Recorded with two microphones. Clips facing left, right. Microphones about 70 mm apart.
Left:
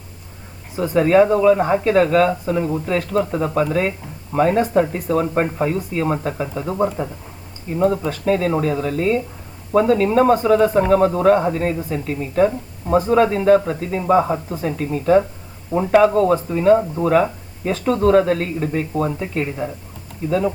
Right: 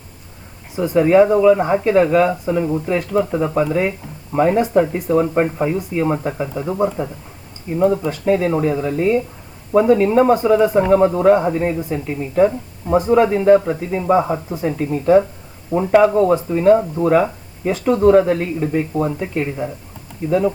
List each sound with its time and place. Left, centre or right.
0.8 s speech: centre
2.9 s speech: centre
8.1 s speech: centre
15.7 s speech: left
16.0 s speech: centre